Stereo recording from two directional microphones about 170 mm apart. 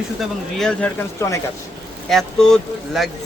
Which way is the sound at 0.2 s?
5° left (ahead or behind).